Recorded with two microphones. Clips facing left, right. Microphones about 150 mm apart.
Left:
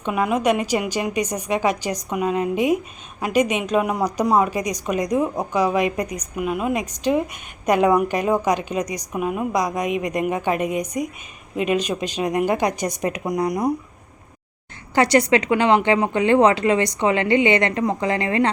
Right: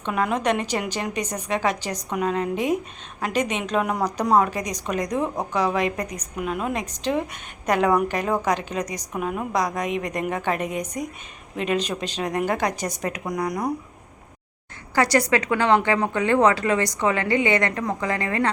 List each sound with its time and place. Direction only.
0.0 s speech: 10° left (ahead or behind)
14.9 s speech: 25° left (ahead or behind)